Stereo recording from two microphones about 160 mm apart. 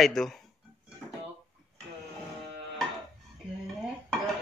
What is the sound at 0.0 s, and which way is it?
Speech, centre (ahead or behind).